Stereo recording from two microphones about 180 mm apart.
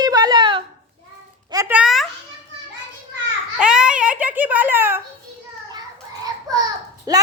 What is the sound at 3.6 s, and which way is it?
Babbling, 5° right (ahead or behind).